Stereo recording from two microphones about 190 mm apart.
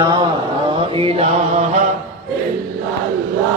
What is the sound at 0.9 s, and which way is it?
Mantra, 30° right (ahead or behind).